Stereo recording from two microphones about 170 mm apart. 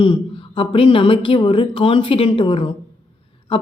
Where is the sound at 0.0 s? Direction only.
30° left (ahead or behind).